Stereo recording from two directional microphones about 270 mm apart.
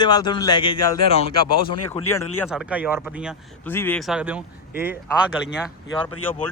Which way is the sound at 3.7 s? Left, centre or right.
Centre.